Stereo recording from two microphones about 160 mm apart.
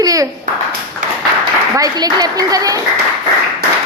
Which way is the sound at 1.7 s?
25° right (ahead or behind).